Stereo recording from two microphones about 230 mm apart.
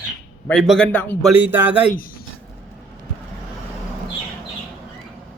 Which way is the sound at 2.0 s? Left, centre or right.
Left.